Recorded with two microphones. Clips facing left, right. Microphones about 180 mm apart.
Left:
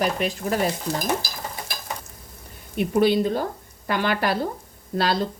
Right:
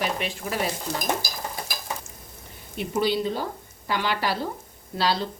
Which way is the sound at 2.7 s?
55° left (ahead or behind).